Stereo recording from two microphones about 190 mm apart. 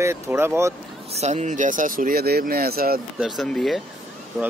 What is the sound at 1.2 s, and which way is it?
Speech, 35° right (ahead or behind).